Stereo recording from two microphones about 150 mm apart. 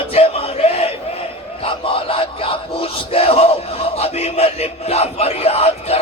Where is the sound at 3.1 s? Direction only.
40° left (ahead or behind).